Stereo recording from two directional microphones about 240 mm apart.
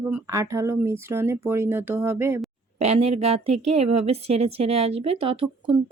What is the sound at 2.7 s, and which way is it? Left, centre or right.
Speech, right.